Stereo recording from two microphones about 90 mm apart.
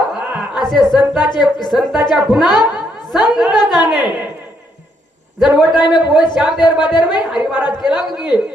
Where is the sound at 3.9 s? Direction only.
15° right (ahead or behind).